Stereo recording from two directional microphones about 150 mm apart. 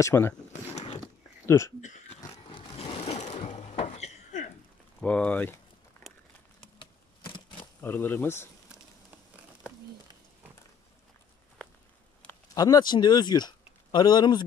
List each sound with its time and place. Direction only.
0.0 s speech: 15° left (ahead or behind)
1.4 s speech: 15° left (ahead or behind)
1.8 s speech: 50° left (ahead or behind)
2.3 s a sound: 35° left (ahead or behind)
5.0 s speech: 10° left (ahead or behind)
6.0 s a sound: 15° left (ahead or behind)
6.8 s a sound: 35° left (ahead or behind)
7.8 s speech: 15° left (ahead or behind)
12.5 s speech: 25° left (ahead or behind)